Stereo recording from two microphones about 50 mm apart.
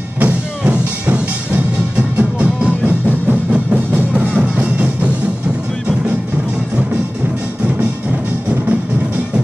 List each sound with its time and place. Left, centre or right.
0.2 s music: right
4.1 s music: centre